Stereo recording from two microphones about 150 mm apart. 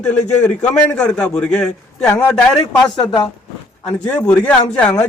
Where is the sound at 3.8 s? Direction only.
5° left (ahead or behind).